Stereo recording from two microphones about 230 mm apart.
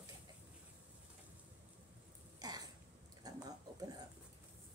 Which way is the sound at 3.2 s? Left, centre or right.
Centre.